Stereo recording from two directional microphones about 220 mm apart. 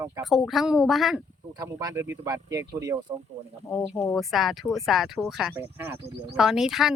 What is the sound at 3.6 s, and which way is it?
Speech, 15° left (ahead or behind).